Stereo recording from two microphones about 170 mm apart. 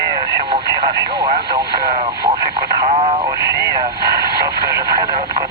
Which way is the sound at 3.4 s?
75° right (ahead or behind).